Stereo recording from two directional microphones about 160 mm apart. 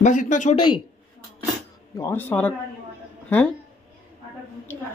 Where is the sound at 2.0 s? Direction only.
15° left (ahead or behind).